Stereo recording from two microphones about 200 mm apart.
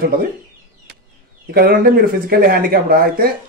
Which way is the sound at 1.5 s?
50° right (ahead or behind).